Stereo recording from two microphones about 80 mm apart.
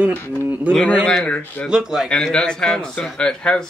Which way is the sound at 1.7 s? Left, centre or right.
Centre.